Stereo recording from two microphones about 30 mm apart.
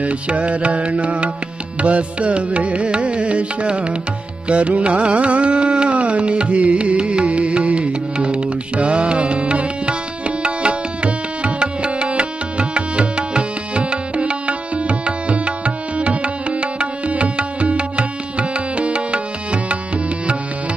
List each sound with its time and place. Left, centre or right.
0.0 s music: right